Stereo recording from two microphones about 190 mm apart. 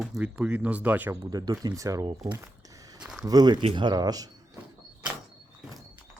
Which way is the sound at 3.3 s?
20° right (ahead or behind).